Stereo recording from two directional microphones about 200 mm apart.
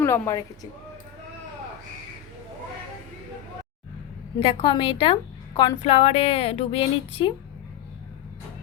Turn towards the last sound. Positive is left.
turn(degrees=25)  # may be behind; listen again after turning